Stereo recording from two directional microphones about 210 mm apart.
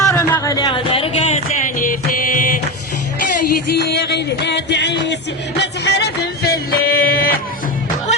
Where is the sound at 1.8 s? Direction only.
40° left (ahead or behind).